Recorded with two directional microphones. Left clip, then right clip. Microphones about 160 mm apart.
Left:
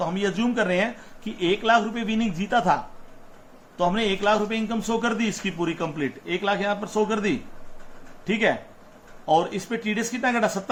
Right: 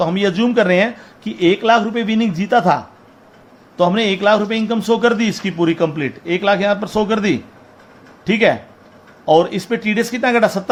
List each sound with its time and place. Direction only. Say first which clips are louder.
0.0 s a man's voice: right 9 dB; 45° right (ahead or behind)
3.8 s a man's voice: right 8 dB; 40° right (ahead or behind)